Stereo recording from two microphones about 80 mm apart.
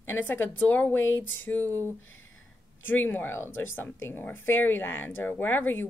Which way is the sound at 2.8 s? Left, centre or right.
Left.